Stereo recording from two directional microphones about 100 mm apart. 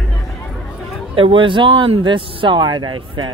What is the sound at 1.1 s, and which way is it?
Speech, 60° right (ahead or behind).